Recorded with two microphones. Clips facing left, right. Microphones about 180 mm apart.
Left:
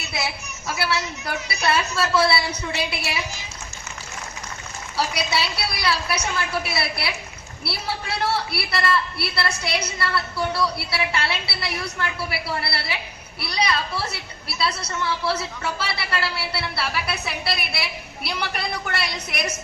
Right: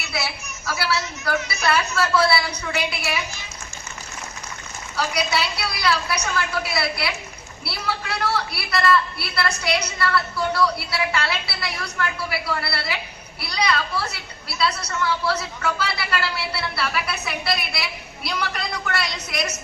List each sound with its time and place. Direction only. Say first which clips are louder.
0.1 s a woman's voice: even; 20° left (ahead or behind)
4.9 s a woman's voice: right 1 dB; 30° left (ahead or behind)